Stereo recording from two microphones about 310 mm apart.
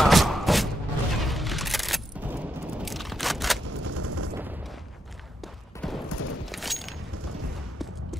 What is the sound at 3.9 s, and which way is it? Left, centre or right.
Gunshot, right.